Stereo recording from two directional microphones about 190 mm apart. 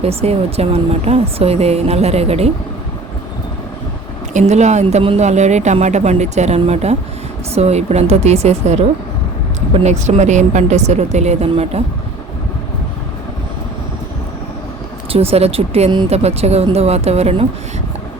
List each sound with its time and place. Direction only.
0.0 s a woman's voice: 30° right (ahead or behind)
4.4 s a woman's voice: 35° right (ahead or behind)
15.1 s a woman's voice: 30° right (ahead or behind)